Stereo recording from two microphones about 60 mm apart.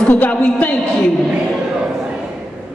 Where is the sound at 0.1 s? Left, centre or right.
Left.